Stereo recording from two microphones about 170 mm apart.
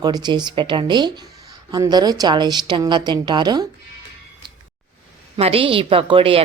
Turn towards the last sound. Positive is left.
turn(degrees=-35)  # may be behind; listen again after turning